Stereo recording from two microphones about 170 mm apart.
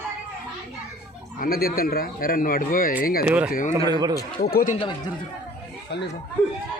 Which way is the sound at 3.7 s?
20° right (ahead or behind).